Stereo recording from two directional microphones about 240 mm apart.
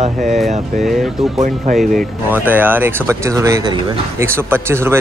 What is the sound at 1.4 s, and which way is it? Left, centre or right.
Speech, right.